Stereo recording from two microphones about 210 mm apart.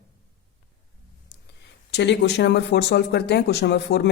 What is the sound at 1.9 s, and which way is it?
Speech, 55° left (ahead or behind).